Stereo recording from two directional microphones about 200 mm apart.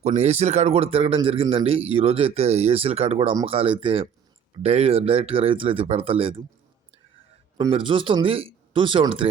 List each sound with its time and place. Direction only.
0.0 s a man's voice: 35° right (ahead or behind)
7.6 s a man's voice: 25° right (ahead or behind)